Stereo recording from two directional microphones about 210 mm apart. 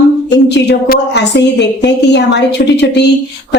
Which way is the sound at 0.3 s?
55° left (ahead or behind).